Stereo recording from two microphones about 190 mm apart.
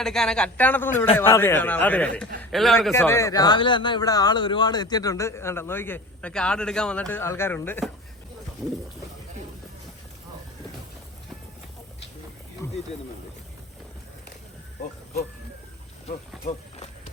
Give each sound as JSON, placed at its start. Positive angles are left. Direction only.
{"t": 0.0, "sound": "a man's voice", "side_deg": 5}
{"t": 2.9, "sound": "a man's voice", "side_deg": 15}
{"t": 8.6, "sound": "a man's voice", "side_deg": 0}
{"t": 12.6, "sound": "a sound", "side_deg": 15}